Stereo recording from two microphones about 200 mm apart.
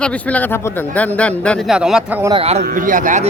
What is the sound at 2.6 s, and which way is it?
Speech, 45° right (ahead or behind).